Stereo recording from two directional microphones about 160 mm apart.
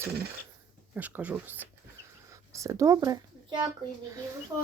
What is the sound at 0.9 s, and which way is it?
Speech, 10° right (ahead or behind).